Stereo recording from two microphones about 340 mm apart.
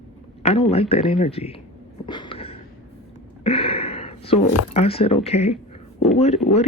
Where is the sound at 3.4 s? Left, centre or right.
Centre.